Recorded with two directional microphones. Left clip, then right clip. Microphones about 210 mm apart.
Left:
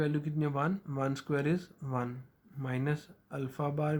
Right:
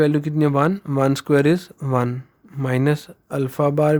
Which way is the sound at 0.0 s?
50° right (ahead or behind).